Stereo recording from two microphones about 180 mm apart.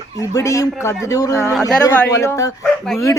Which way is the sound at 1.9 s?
15° left (ahead or behind).